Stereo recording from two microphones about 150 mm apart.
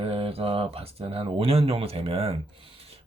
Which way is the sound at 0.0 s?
40° right (ahead or behind).